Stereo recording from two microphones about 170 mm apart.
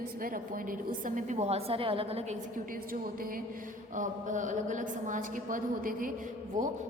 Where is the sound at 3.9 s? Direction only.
50° right (ahead or behind).